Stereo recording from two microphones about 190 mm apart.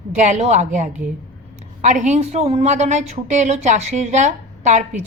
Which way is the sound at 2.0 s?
35° right (ahead or behind).